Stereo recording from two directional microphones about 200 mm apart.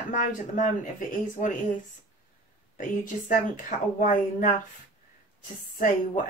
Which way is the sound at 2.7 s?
40° left (ahead or behind).